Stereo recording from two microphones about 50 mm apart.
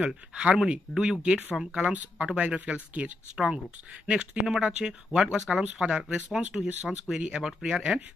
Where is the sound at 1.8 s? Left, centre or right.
Right.